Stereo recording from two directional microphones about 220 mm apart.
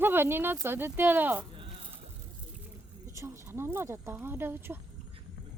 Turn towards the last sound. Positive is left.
turn(degrees=-10)  # may be behind; listen again after turning